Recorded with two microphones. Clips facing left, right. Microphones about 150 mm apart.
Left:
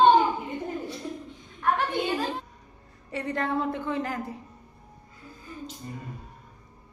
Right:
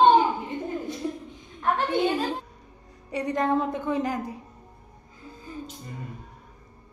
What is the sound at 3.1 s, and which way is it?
A woman's voice, 15° right (ahead or behind).